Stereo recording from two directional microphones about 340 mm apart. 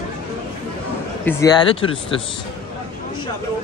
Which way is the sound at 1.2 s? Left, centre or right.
Centre.